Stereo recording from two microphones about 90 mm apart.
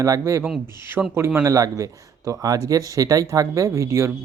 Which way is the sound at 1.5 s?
40° right (ahead or behind).